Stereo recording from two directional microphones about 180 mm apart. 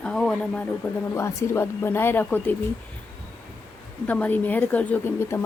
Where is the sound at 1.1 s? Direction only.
15° left (ahead or behind).